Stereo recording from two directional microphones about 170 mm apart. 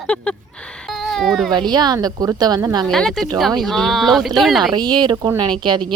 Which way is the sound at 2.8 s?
5° left (ahead or behind).